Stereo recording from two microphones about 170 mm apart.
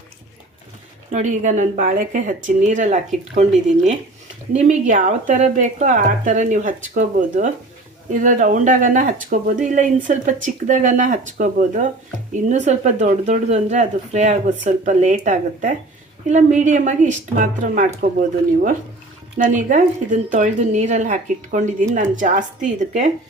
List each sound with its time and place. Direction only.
1.1 s speech: 45° right (ahead or behind)
4.5 s speech: 40° right (ahead or behind)
19.6 s speech: 50° right (ahead or behind)